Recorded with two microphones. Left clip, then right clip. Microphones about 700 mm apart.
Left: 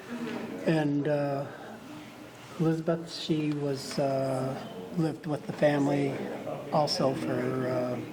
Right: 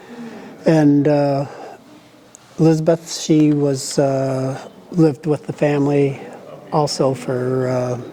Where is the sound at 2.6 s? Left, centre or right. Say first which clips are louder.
Right 14 dB; right.